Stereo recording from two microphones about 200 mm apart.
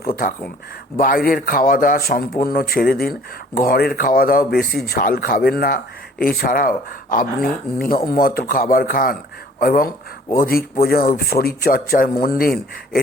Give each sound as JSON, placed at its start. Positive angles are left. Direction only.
{"t": 0.9, "sound": "speech", "side_deg": 45}